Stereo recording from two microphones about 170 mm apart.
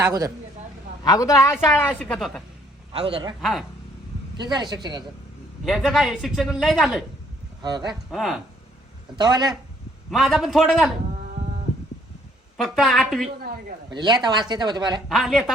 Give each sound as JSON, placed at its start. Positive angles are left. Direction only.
{"t": 1.0, "sound": "a woman's voice", "side_deg": 20}
{"t": 2.9, "sound": "a man's voice", "side_deg": -35}
{"t": 4.4, "sound": "speech", "side_deg": -25}
{"t": 5.6, "sound": "speech", "side_deg": 0}
{"t": 7.6, "sound": "speech", "side_deg": -25}
{"t": 8.1, "sound": "speech", "side_deg": 0}
{"t": 9.1, "sound": "speech", "side_deg": -25}
{"t": 10.1, "sound": "speech", "side_deg": 0}
{"t": 12.5, "sound": "speech", "side_deg": 0}
{"t": 13.9, "sound": "speech", "side_deg": -25}
{"t": 15.1, "sound": "speech", "side_deg": 0}